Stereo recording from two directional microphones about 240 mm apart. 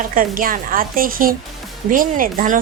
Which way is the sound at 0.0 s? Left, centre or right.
Right.